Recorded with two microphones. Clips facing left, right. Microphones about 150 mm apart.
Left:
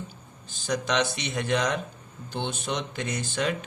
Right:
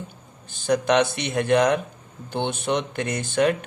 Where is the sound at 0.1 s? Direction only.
55° right (ahead or behind).